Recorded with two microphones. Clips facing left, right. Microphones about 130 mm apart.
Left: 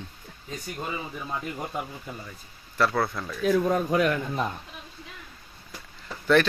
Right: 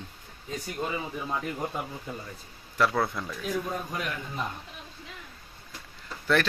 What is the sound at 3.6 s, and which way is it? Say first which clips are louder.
Speech: left 10 dB; 80° left.